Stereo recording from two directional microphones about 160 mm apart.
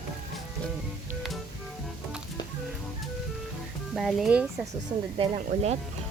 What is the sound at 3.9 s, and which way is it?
Speech, centre (ahead or behind).